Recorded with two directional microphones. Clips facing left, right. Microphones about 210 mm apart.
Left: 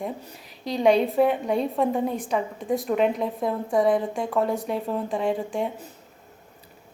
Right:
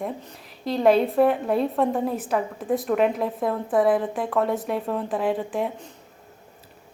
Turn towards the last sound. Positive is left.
turn(degrees=0)  # may be behind; listen again after turning